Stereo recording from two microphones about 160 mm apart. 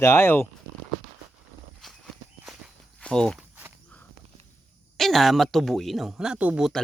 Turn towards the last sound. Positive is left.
turn(degrees=-5)  # may be behind; listen again after turning